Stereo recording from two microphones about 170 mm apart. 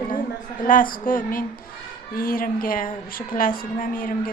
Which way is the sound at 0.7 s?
55° left (ahead or behind).